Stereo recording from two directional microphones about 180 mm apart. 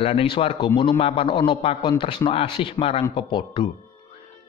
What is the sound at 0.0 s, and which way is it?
A man's voice, 30° left (ahead or behind).